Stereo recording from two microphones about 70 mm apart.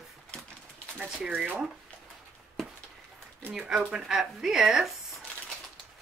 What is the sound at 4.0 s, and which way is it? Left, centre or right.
Speech, centre.